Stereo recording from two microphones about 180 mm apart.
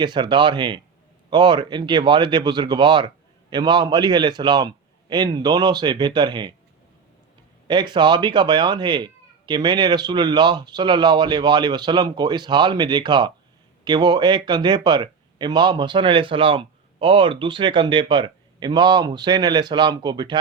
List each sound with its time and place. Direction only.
0.0 s speech: 25° right (ahead or behind)
7.7 s speech: 25° right (ahead or behind)